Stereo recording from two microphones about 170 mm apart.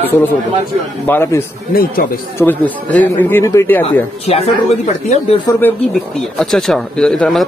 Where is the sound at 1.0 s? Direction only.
10° left (ahead or behind).